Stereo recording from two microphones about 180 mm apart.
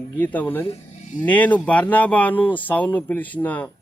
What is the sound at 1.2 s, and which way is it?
A man's voice, 10° left (ahead or behind).